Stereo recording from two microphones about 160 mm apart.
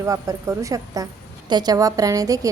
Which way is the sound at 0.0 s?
20° right (ahead or behind).